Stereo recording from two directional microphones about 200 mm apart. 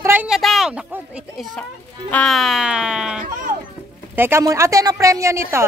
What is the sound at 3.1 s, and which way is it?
Speech, 45° right (ahead or behind).